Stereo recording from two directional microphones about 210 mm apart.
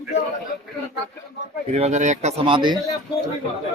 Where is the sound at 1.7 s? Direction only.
35° right (ahead or behind).